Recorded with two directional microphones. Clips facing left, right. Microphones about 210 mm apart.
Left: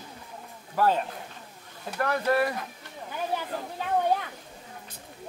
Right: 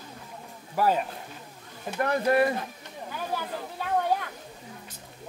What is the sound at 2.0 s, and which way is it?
Speech, 25° right (ahead or behind).